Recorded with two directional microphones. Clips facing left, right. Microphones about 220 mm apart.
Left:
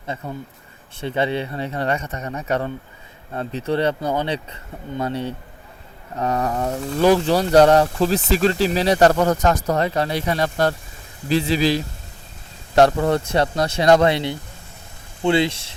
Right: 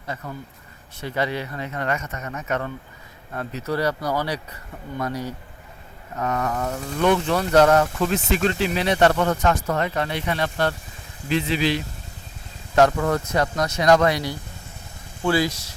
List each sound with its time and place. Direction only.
1.0 s speech: 25° left (ahead or behind)